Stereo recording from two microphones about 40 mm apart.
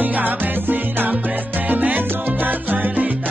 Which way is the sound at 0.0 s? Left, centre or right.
Right.